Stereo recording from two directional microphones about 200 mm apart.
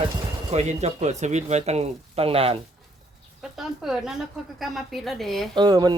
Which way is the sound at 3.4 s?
Centre (ahead or behind).